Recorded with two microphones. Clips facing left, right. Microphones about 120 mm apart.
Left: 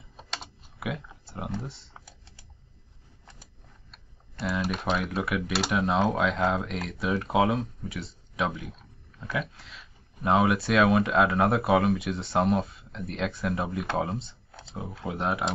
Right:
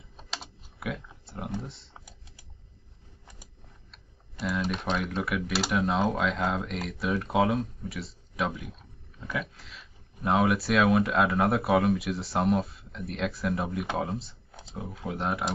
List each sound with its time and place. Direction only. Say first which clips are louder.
0.2 s typing: left 1 dB; centre (ahead or behind)
1.6 s speech: left 1 dB; centre (ahead or behind)
2.0 s a sound: even; 15° right (ahead or behind)
4.5 s speech: left 1 dB; 5° left (ahead or behind)
14.5 s a sound: left 1 dB; 10° right (ahead or behind)
15.0 s speech: left 2 dB; centre (ahead or behind)